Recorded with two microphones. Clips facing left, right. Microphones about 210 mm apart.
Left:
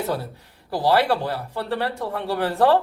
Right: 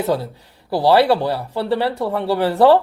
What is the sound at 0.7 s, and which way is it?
Speech, 80° right.